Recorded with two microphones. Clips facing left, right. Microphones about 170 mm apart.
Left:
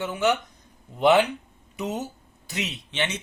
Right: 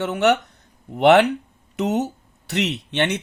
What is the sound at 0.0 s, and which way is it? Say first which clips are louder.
Speech: right 5 dB; 70° right (ahead or behind).